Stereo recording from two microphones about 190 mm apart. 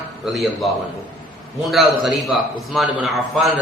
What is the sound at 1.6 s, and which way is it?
A man's voice, centre (ahead or behind).